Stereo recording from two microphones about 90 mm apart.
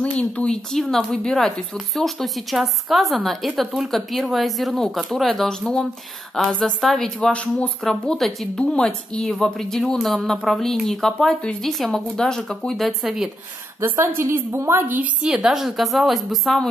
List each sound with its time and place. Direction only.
0.0 s a woman's voice: 10° left (ahead or behind)
13.7 s a woman's voice: 30° right (ahead or behind)
15.2 s speech: 5° right (ahead or behind)